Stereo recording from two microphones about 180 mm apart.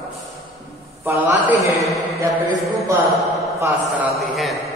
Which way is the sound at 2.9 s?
15° right (ahead or behind).